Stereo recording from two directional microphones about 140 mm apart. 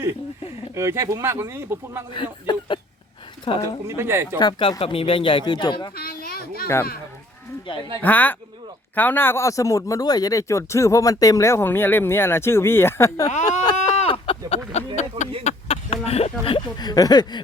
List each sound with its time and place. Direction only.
0.8 s speech: 20° right (ahead or behind)
2.1 s speech: 35° left (ahead or behind)
3.8 s speech: 20° right (ahead or behind)
4.4 s speech: 30° left (ahead or behind)
6.0 s children playing: 90° left
8.0 s a man's voice: 10° left (ahead or behind)
13.3 s speech: 55° left (ahead or behind)
13.7 s a sound: 50° left (ahead or behind)
16.4 s a man's voice: 40° left (ahead or behind)